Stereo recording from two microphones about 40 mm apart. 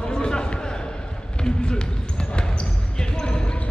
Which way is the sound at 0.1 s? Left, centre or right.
Centre.